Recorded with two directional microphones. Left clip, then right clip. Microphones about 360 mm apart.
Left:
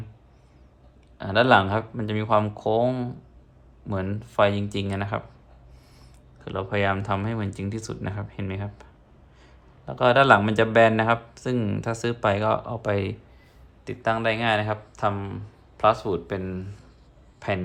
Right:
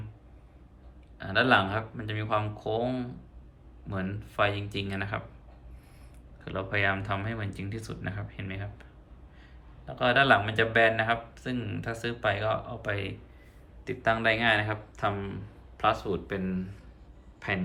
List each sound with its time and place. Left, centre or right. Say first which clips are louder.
1.2 s speech: left 5 dB; centre
6.4 s speech: left 3 dB; centre